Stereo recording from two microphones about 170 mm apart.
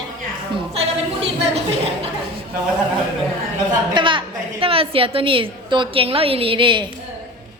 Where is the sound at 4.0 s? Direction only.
30° right (ahead or behind).